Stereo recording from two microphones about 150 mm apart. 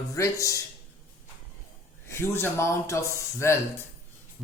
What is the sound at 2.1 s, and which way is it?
Speech, 15° left (ahead or behind).